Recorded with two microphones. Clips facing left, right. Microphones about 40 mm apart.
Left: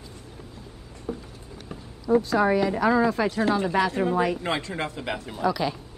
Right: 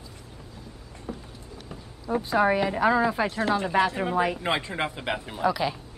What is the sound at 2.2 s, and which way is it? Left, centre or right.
Speech, right.